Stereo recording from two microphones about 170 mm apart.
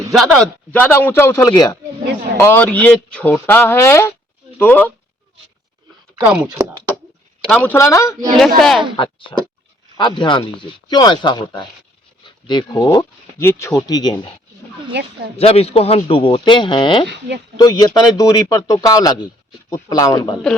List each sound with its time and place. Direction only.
0.1 s speech: 5° left (ahead or behind)
6.2 s speech: 15° right (ahead or behind)
7.4 s speech: 10° left (ahead or behind)
8.4 s speech: centre (ahead or behind)
10.0 s speech: 30° left (ahead or behind)
14.9 s speech: 90° right
15.4 s speech: 35° left (ahead or behind)
17.1 s speech: 90° right
17.6 s speech: 20° left (ahead or behind)